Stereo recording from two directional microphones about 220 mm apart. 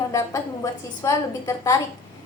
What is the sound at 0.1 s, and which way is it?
A woman's voice, 15° left (ahead or behind).